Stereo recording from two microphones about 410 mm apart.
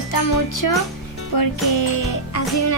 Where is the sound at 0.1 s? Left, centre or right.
Left.